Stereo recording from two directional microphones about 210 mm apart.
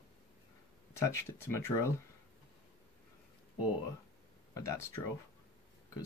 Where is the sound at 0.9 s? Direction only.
15° left (ahead or behind).